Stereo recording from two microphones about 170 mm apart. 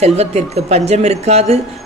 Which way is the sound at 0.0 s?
40° right (ahead or behind).